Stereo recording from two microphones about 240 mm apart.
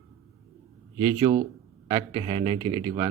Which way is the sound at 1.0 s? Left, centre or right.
Centre.